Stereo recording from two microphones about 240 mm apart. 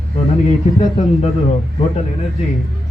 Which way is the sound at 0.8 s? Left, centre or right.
Left.